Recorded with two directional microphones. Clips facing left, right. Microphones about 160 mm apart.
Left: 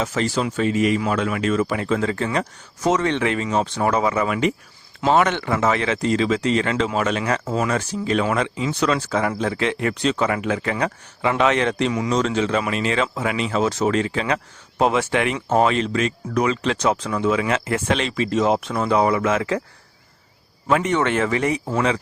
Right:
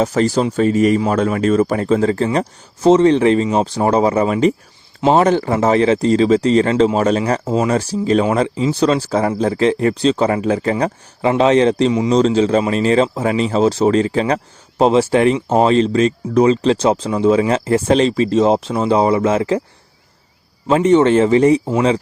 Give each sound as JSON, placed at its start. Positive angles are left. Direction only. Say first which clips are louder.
{"t": 0.0, "sound": "speech", "louder": "right 7 dB", "side_deg": -40}
{"t": 20.7, "sound": "speech", "louder": "right 8 dB", "side_deg": -30}